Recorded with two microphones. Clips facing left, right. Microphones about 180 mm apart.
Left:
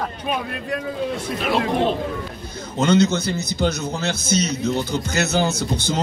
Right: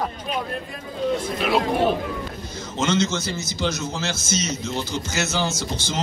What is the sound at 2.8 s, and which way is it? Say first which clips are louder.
Speech: left 5 dB; 60° left (ahead or behind).